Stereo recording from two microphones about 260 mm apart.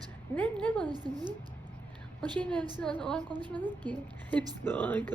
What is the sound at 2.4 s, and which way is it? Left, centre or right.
Speech, centre.